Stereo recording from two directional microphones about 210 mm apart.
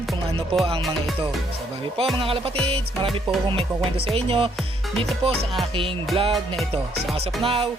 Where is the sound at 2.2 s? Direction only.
25° right (ahead or behind).